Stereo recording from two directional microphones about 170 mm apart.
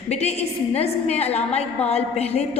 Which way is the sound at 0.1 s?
40° left (ahead or behind).